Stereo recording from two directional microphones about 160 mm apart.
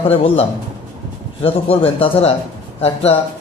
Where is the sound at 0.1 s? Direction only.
40° left (ahead or behind).